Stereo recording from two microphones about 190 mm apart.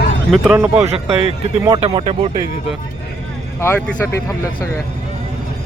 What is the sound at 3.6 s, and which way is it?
Speech, 10° left (ahead or behind).